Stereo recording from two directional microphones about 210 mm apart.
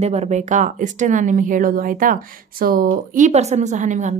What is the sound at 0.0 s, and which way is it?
Speech, 30° right (ahead or behind).